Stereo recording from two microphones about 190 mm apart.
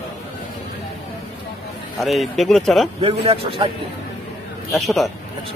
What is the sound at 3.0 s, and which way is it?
Speech, 30° right (ahead or behind).